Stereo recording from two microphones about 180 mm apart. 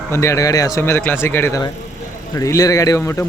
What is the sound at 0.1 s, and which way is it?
A man's voice, 15° left (ahead or behind).